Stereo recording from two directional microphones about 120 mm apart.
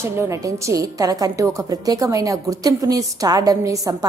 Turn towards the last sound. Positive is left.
turn(degrees=-30)  # may be behind; listen again after turning